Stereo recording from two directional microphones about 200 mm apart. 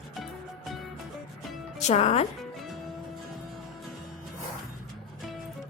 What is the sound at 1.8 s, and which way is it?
Speech, 35° left (ahead or behind).